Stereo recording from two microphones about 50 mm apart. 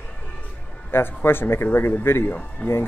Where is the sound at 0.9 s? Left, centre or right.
Left.